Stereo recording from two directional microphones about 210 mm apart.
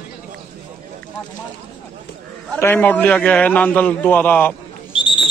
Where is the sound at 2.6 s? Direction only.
10° left (ahead or behind).